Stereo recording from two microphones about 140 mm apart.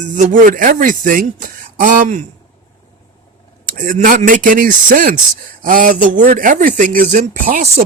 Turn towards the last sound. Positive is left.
turn(degrees=-75)  # may be behind; listen again after turning